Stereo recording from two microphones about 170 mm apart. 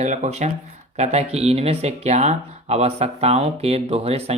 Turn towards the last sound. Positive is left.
turn(degrees=-35)  # may be behind; listen again after turning